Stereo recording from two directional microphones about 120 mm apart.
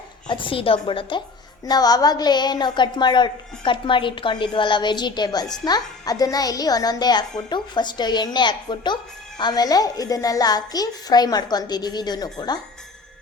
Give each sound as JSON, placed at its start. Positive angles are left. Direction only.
{"t": 0.3, "sound": "a woman's voice", "side_deg": 45}
{"t": 1.6, "sound": "a woman's voice", "side_deg": 35}